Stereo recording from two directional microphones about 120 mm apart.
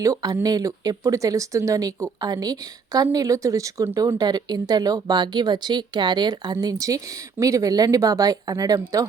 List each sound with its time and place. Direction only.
0.0 s speech: 30° right (ahead or behind)